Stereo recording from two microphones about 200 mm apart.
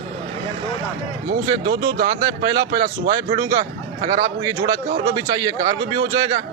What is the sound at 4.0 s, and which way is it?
Speech, 40° right (ahead or behind).